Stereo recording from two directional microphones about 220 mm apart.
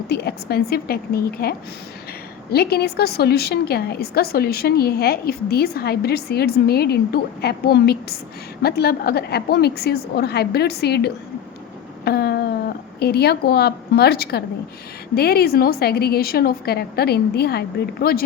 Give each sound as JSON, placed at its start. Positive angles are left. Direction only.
{"t": 0.1, "sound": "a woman's voice", "side_deg": 45}